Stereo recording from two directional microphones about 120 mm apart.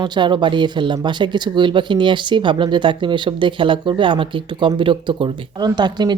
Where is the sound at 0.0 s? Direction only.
40° right (ahead or behind).